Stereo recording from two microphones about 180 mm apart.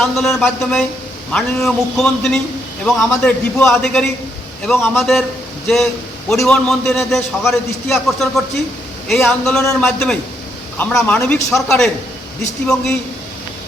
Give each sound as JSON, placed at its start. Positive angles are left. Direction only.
{"t": 0.0, "sound": "a man's voice", "side_deg": 0}